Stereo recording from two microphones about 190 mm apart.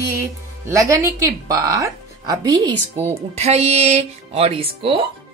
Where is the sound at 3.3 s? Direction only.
35° right (ahead or behind).